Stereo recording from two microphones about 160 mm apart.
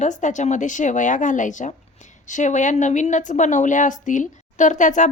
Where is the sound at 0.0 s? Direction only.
50° left (ahead or behind).